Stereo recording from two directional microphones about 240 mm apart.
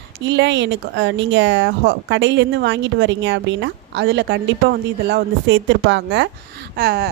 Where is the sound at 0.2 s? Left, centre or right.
Right.